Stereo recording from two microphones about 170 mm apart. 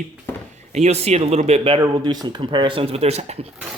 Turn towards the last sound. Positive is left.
turn(degrees=-40)  # may be behind; listen again after turning